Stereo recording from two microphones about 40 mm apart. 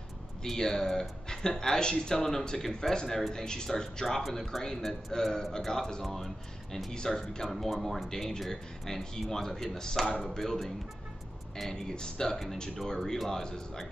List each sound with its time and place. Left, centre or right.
0.6 s speech: centre
6.0 s speech: centre
6.9 s speech: centre
7.4 s speech: centre
11.7 s speech: centre